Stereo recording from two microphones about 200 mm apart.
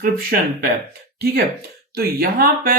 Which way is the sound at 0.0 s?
45° right (ahead or behind).